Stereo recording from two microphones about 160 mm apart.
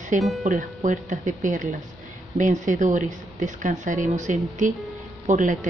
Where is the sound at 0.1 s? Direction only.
50° right (ahead or behind).